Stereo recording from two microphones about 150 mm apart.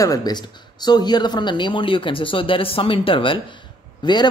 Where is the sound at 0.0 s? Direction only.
25° left (ahead or behind).